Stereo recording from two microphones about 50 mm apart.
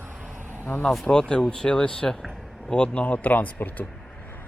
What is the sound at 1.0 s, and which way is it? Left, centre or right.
Speech, centre.